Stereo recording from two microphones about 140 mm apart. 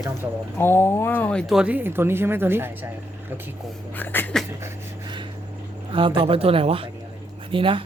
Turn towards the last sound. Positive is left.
turn(degrees=-40)  # may be behind; listen again after turning